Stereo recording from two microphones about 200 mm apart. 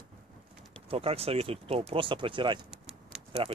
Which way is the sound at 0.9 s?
30° right (ahead or behind).